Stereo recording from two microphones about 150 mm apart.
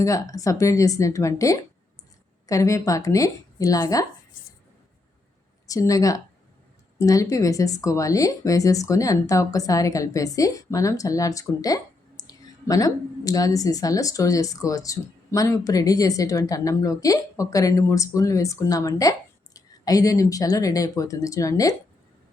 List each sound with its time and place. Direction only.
0.0 s speech: 20° left (ahead or behind)
5.6 s speech: 20° left (ahead or behind)